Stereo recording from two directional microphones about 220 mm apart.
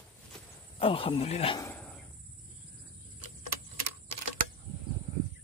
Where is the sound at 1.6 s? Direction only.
5° left (ahead or behind).